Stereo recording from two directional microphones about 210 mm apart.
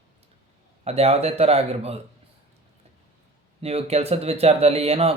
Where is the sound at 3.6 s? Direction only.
30° right (ahead or behind).